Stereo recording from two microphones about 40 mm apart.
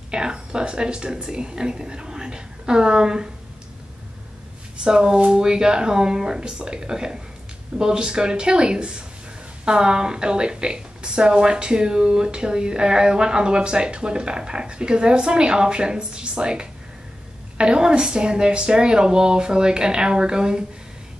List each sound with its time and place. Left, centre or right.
0.1 s speech: centre
4.8 s a woman's voice: centre